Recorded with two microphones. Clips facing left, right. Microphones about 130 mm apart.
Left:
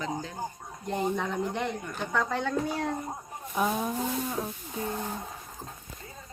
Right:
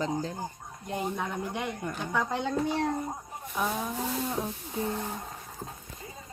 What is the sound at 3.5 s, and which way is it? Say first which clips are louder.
Speech: left 3 dB; 5° left (ahead or behind).